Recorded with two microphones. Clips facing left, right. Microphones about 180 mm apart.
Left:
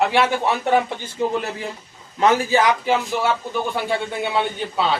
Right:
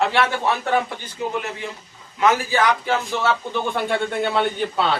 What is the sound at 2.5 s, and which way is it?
Speech, 15° left (ahead or behind).